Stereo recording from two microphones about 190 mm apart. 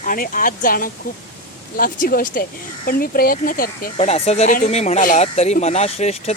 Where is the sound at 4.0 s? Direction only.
35° left (ahead or behind).